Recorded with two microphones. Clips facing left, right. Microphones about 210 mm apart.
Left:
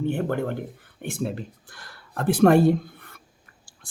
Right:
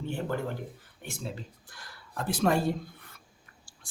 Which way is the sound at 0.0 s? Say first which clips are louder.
Left 7 dB; 55° left (ahead or behind).